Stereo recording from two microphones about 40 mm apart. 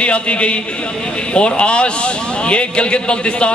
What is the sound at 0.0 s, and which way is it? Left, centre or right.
A man's voice, left.